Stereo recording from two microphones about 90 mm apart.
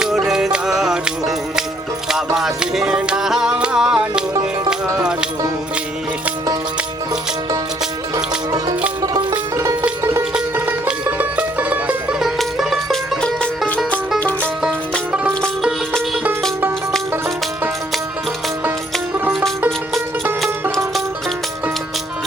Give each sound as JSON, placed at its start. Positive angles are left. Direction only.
{"t": 0.0, "sound": "music", "side_deg": -5}
{"t": 10.0, "sound": "music", "side_deg": -30}
{"t": 10.8, "sound": "music", "side_deg": -15}
{"t": 12.2, "sound": "music", "side_deg": -5}
{"t": 14.2, "sound": "music", "side_deg": 15}